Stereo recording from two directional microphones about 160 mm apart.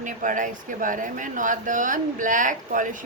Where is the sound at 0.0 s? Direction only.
55° right (ahead or behind).